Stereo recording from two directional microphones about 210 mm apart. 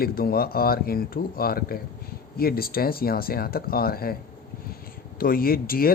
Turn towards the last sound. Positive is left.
turn(degrees=45)  # may be behind; listen again after turning